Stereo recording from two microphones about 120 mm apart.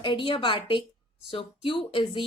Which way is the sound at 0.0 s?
40° left (ahead or behind).